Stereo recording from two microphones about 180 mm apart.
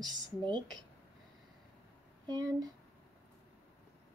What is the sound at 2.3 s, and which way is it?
Speech, 20° right (ahead or behind).